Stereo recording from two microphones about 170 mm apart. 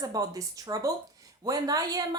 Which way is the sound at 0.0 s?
20° right (ahead or behind).